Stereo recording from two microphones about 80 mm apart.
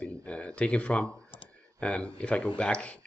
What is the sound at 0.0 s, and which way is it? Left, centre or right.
Clicking, centre.